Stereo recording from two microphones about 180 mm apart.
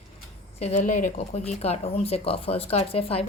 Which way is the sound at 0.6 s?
40° left (ahead or behind).